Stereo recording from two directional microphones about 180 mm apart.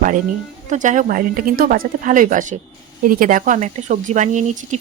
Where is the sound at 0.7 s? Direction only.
45° right (ahead or behind).